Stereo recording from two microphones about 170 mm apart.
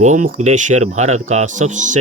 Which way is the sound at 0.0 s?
45° right (ahead or behind).